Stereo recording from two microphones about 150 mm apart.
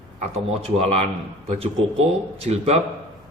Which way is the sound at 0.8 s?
45° right (ahead or behind).